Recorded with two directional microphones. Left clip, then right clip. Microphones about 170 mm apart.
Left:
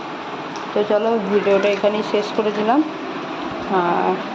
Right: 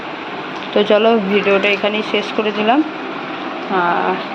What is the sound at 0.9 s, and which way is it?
Speech, 20° right (ahead or behind).